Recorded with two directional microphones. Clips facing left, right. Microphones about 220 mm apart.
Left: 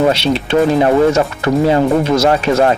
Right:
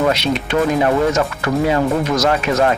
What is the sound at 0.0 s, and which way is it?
Speech, 30° left (ahead or behind).